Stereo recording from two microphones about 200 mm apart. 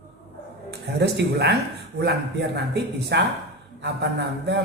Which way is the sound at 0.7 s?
55° right (ahead or behind).